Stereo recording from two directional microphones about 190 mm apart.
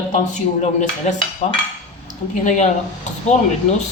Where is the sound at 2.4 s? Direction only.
40° left (ahead or behind).